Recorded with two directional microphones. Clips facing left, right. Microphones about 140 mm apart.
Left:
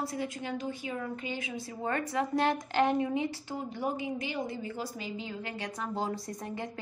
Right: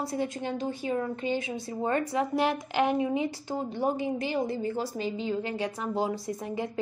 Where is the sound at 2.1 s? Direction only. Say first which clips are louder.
Right 2 dB; 10° right (ahead or behind).